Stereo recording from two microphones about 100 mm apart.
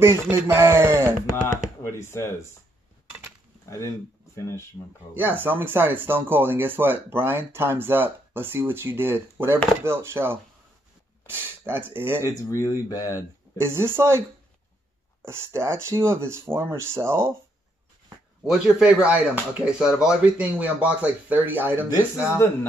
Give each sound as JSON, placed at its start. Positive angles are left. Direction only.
{"t": 0.0, "sound": "speech", "side_deg": -25}
{"t": 1.8, "sound": "speech", "side_deg": 25}
{"t": 3.6, "sound": "speech", "side_deg": 30}
{"t": 5.1, "sound": "speech", "side_deg": -20}
{"t": 12.2, "sound": "speech", "side_deg": 30}
{"t": 13.6, "sound": "speech", "side_deg": -25}
{"t": 15.2, "sound": "speech", "side_deg": -25}
{"t": 18.4, "sound": "speech", "side_deg": -5}
{"t": 21.9, "sound": "speech", "side_deg": 30}